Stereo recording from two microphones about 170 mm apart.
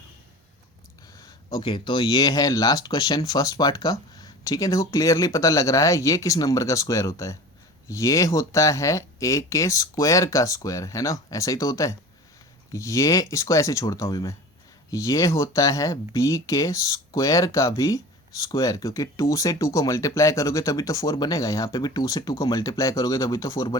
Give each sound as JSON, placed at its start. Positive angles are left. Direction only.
{"t": 1.2, "sound": "speech", "side_deg": 25}